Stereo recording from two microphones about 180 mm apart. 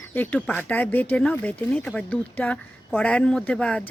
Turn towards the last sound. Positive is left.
turn(degrees=5)  # may be behind; listen again after turning